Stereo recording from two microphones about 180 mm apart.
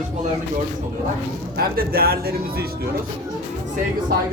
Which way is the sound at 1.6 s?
55° right (ahead or behind).